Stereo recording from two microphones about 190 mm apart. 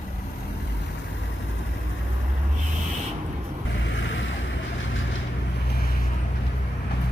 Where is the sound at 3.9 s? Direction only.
85° left.